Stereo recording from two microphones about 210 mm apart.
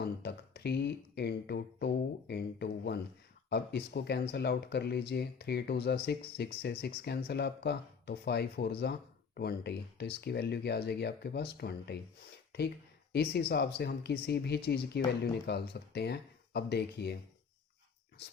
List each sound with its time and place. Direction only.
0.0 s a sound: 50° left (ahead or behind)
3.5 s speech: 50° left (ahead or behind)
13.5 s speech: 50° left (ahead or behind)